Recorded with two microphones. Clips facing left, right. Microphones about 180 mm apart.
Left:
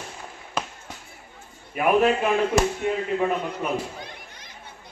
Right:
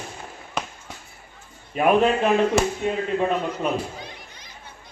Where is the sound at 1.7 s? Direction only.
25° right (ahead or behind).